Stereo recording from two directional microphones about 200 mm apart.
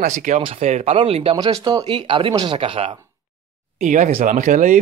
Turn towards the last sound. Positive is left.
turn(degrees=-40)  # may be behind; listen again after turning